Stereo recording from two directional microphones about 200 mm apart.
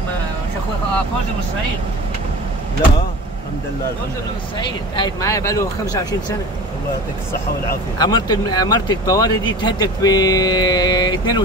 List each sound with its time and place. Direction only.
4.6 s speech: 20° left (ahead or behind)
8.0 s speech: 20° left (ahead or behind)